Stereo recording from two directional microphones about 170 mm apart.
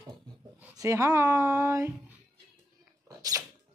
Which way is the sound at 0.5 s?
20° right (ahead or behind).